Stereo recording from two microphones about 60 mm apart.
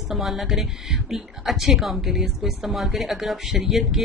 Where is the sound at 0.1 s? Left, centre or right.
Centre.